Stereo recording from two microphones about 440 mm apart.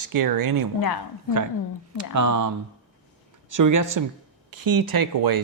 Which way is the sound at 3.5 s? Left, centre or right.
Right.